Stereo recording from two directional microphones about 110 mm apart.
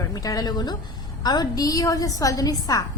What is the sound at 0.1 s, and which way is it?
A woman's voice, 30° left (ahead or behind).